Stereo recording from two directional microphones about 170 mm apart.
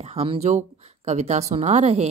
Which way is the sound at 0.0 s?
35° right (ahead or behind).